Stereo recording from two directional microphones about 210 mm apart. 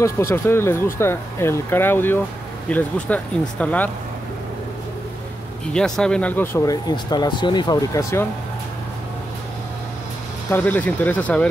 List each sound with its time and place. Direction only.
0.0 s speech: 15° left (ahead or behind)
5.7 s speech: 5° left (ahead or behind)
10.5 s speech: 10° left (ahead or behind)